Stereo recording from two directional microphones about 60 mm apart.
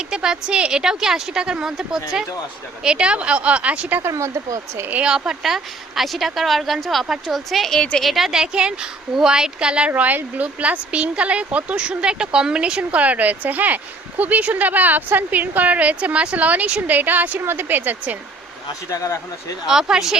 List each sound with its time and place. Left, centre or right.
0.0 s a woman's voice: centre
4.0 s speech: right
4.9 s speech: centre
7.8 s a woman's voice: centre
8.0 s a woman's voice: centre
9.9 s speech: right
18.7 s speech: left
19.6 s a woman's voice: centre